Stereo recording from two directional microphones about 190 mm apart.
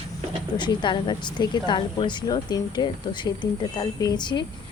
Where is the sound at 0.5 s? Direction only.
25° left (ahead or behind).